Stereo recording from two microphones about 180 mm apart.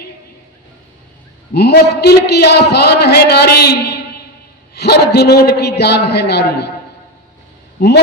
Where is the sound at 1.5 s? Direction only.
70° left (ahead or behind).